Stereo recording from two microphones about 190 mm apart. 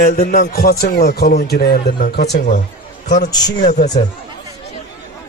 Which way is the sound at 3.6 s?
40° left (ahead or behind).